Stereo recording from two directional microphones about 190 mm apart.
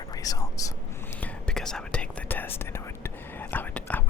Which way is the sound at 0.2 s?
20° left (ahead or behind).